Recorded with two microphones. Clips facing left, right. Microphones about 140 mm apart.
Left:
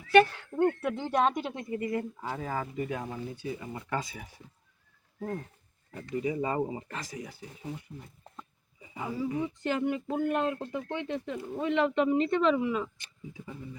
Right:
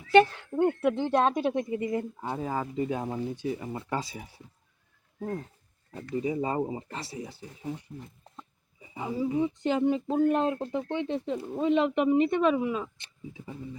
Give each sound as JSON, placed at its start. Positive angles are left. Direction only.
{"t": 0.1, "sound": "speech", "side_deg": -20}
{"t": 6.2, "sound": "speech", "side_deg": -30}
{"t": 9.0, "sound": "speech", "side_deg": -20}